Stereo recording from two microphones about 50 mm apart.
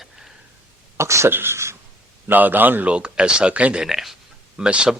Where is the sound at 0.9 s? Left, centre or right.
Right.